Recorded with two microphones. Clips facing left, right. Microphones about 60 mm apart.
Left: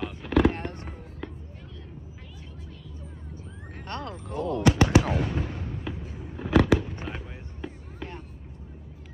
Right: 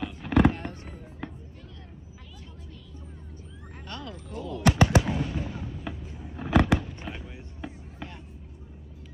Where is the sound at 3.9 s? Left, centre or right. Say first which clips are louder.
Left 4 dB; left.